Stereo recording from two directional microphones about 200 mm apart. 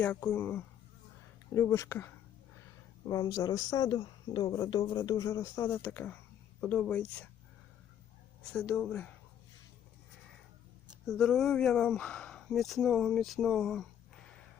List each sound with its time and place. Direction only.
0.0 s speech: 5° left (ahead or behind)
8.5 s speech: 5° left (ahead or behind)
11.0 s speech: centre (ahead or behind)